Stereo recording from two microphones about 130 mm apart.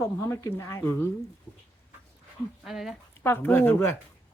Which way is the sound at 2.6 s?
Centre (ahead or behind).